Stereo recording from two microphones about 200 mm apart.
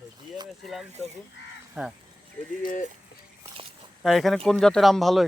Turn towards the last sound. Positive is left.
turn(degrees=0)  # may be behind; listen again after turning